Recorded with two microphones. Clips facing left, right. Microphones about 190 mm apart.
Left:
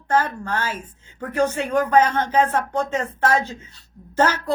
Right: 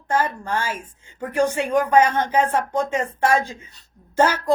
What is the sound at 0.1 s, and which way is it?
Speech, 10° right (ahead or behind).